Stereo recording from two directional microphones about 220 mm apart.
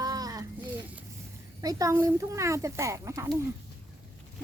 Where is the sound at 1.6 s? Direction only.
15° right (ahead or behind).